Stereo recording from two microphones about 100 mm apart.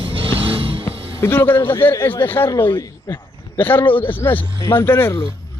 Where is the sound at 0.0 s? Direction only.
65° right (ahead or behind).